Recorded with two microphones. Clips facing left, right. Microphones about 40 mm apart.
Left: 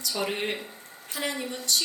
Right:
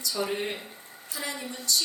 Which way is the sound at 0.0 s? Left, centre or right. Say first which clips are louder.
Left 1 dB; left.